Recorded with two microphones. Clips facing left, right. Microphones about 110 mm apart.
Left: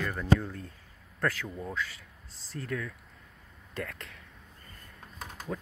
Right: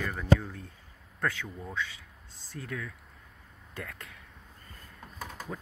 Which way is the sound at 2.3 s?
90° left.